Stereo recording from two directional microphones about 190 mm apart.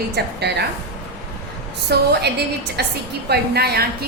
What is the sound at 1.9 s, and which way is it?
A woman's voice, 60° right (ahead or behind).